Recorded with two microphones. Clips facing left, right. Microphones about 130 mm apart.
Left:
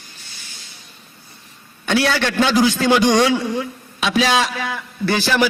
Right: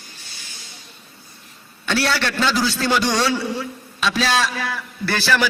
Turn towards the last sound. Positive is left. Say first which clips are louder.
# left 3 dB
turn(degrees=15)  # may be behind; listen again after turning